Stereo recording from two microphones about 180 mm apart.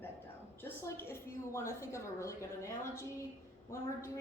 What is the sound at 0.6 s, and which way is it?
A woman's voice, 15° left (ahead or behind).